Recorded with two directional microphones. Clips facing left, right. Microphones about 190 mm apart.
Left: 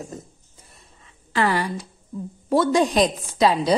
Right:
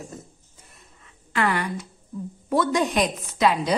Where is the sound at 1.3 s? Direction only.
35° left (ahead or behind).